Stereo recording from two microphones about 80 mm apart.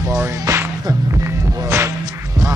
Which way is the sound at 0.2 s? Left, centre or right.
Right.